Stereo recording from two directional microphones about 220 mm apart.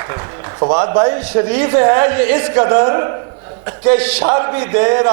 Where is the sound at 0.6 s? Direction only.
25° right (ahead or behind).